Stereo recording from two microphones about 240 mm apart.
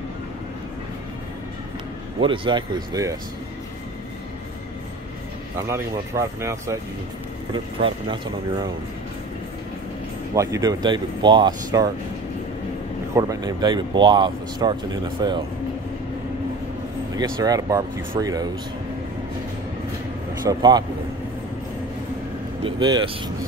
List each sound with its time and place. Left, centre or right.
2.1 s speech: right
5.6 s speech: centre
10.3 s speech: centre
13.1 s speech: centre
17.4 s speech: centre
20.4 s speech: centre
22.6 s speech: centre